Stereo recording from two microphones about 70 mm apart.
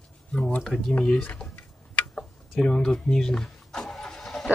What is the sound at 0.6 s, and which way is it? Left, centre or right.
Speech, centre.